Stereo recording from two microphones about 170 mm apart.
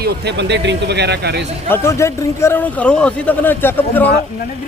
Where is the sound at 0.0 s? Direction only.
90° right.